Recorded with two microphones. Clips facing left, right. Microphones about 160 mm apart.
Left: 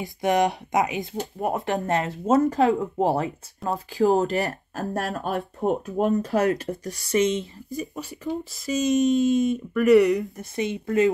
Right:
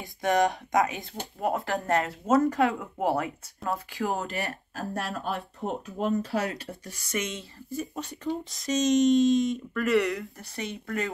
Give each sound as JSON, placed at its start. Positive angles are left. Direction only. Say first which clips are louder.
{"t": 0.0, "sound": "speech", "louder": "left 3 dB", "side_deg": 20}
{"t": 4.0, "sound": "speech", "louder": "left 12 dB", "side_deg": 35}
{"t": 7.2, "sound": "speech", "louder": "left 11 dB", "side_deg": 20}
{"t": 8.0, "sound": "speech", "louder": "left 1 dB", "side_deg": 10}